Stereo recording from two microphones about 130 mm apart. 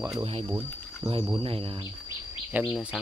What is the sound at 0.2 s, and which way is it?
Speech, 50° right (ahead or behind).